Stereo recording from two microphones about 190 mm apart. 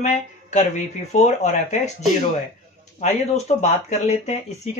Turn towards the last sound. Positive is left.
turn(degrees=35)  # may be behind; listen again after turning